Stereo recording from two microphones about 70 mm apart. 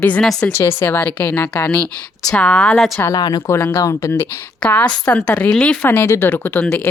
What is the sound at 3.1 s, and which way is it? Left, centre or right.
Speech, left.